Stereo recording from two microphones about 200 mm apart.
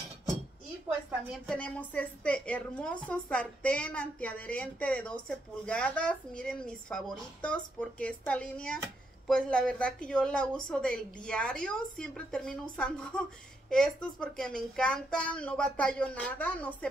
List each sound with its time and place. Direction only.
1.3 s a woman's voice: 5° left (ahead or behind)